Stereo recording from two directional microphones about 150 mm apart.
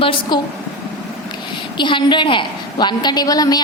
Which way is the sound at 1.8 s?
30° left (ahead or behind).